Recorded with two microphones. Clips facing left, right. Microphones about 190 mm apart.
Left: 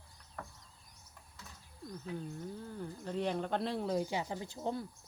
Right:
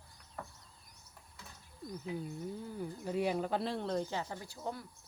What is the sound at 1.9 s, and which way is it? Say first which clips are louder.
Speech: right 2 dB; 10° right (ahead or behind).